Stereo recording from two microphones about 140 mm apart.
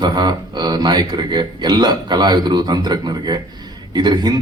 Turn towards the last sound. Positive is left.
turn(degrees=-30)  # may be behind; listen again after turning